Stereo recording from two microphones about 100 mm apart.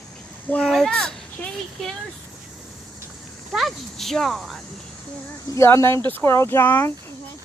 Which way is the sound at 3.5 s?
Centre (ahead or behind).